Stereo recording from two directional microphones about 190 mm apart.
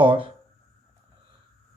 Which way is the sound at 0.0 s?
25° right (ahead or behind).